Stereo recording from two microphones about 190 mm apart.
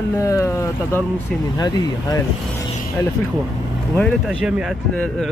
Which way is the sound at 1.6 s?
20° left (ahead or behind).